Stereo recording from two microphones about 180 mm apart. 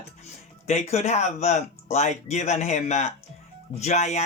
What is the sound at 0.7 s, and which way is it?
Speech, 40° left (ahead or behind).